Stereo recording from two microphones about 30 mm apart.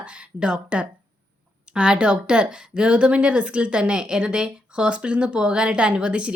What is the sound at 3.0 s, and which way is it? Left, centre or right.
A woman's voice, right.